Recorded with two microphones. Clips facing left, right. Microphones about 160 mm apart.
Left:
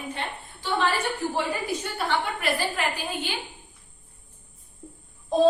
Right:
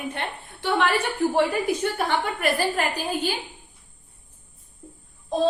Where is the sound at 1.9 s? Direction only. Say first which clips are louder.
Right 2 dB; 45° right (ahead or behind).